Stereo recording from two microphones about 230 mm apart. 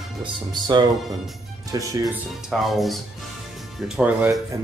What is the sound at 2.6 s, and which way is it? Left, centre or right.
Speech, centre.